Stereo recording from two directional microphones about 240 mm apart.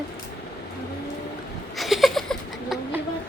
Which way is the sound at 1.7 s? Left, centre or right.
Centre.